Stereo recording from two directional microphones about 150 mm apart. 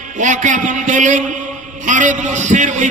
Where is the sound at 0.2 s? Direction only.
55° right (ahead or behind).